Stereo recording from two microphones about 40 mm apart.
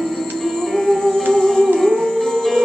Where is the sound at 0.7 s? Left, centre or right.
Centre.